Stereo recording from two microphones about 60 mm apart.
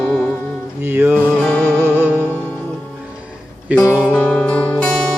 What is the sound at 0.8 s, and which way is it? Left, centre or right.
Music, right.